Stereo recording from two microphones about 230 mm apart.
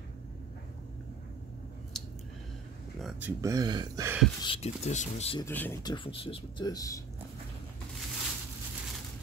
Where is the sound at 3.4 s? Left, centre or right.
Centre.